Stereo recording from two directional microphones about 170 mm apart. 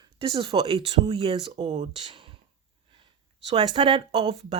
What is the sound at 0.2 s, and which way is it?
Speech, 30° right (ahead or behind).